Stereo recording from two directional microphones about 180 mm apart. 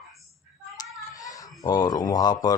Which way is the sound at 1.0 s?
20° left (ahead or behind).